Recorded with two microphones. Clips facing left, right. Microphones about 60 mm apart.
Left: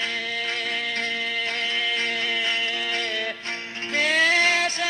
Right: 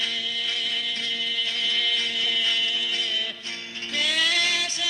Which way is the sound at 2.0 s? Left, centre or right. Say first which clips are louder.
Left 2 dB; left.